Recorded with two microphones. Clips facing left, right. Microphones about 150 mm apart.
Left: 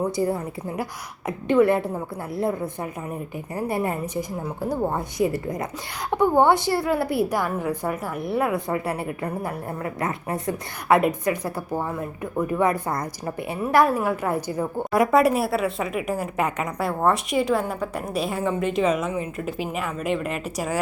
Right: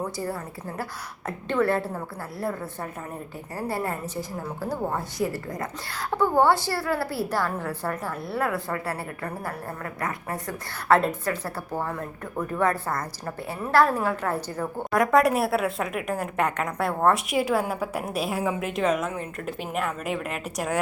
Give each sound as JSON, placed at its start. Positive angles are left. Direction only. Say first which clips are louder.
{"t": 0.0, "sound": "a woman's voice", "louder": "left 7 dB", "side_deg": 20}